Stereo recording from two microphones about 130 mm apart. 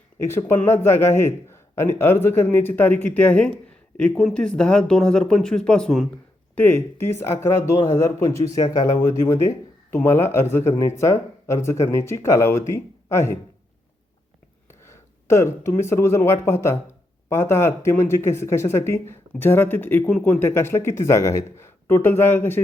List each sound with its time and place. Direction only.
0.2 s a man's voice: 20° left (ahead or behind); by 6.1 s 5° left (ahead or behind)
6.6 s speech: 15° left (ahead or behind)
14.7 s a man's voice: 20° left (ahead or behind)
20.4 s speech: 20° left (ahead or behind)